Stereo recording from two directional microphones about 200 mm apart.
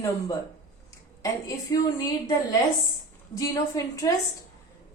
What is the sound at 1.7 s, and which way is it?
Speech, 20° left (ahead or behind).